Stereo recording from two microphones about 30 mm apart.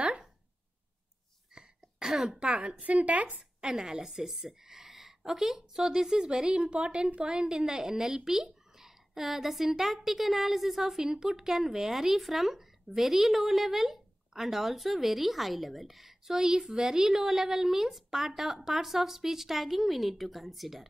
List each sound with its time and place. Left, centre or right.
1.5 s throat clearing: right
2.1 s speech: centre
2.4 s a woman's voice: right
2.8 s a woman's voice: right
3.3 s speech: right
6.6 s a woman's voice: right
7.4 s a woman's voice: right; by 11.0 s centre
11.0 s speech: centre